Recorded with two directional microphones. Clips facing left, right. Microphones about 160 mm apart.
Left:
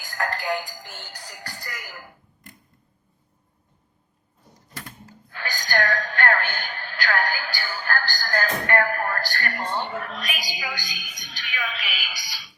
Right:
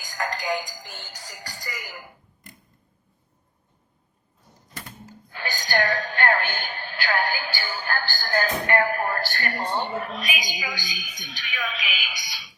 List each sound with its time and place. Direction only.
0.0 s music: centre (ahead or behind)
0.3 s a woman's voice: centre (ahead or behind)
5.3 s a sound: 25° right (ahead or behind)
9.7 s a woman's voice: 20° right (ahead or behind)
10.2 s a woman's voice: centre (ahead or behind)